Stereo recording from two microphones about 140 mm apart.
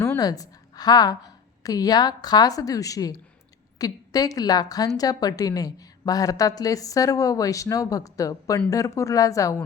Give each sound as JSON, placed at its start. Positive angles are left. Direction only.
{"t": 0.2, "sound": "a woman's voice", "side_deg": 25}